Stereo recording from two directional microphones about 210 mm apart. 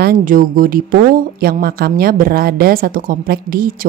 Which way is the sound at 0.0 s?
40° right (ahead or behind).